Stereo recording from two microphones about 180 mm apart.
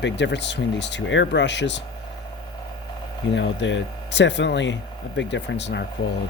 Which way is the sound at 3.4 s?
90° left.